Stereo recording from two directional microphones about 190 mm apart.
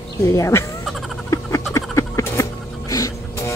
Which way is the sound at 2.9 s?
15° left (ahead or behind).